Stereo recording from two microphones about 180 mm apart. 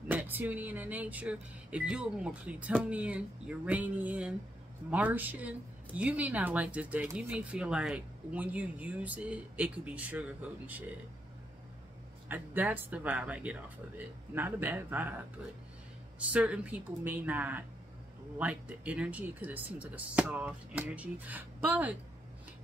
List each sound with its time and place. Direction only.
0.1 s speech: 10° right (ahead or behind)
12.3 s speech: 10° right (ahead or behind)
16.3 s speech: 5° right (ahead or behind)